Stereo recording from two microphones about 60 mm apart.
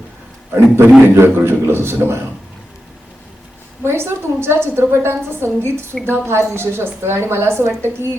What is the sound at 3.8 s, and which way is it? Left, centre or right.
A woman's voice, right.